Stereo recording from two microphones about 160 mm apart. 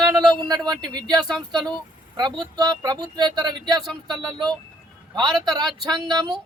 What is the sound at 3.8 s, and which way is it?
Speech, centre (ahead or behind).